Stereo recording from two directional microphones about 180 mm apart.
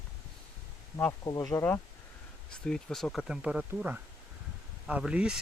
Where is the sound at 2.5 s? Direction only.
5° left (ahead or behind).